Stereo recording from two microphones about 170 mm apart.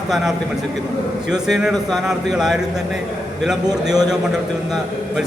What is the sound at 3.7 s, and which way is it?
Speech, 25° right (ahead or behind).